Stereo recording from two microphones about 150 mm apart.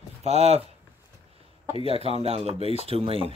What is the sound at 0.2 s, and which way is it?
Speech, 45° right (ahead or behind).